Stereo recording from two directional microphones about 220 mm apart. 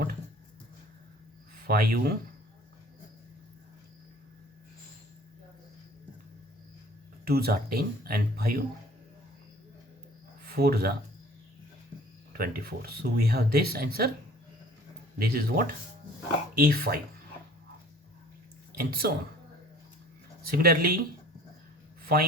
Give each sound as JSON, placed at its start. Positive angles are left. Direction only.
{"t": 1.6, "sound": "speech", "side_deg": -45}
{"t": 7.3, "sound": "speech", "side_deg": -45}
{"t": 10.4, "sound": "speech", "side_deg": -45}
{"t": 12.3, "sound": "speech", "side_deg": -45}
{"t": 15.2, "sound": "speech", "side_deg": -45}
{"t": 18.8, "sound": "speech", "side_deg": -45}
{"t": 20.5, "sound": "speech", "side_deg": -40}
{"t": 22.0, "sound": "a sound", "side_deg": -45}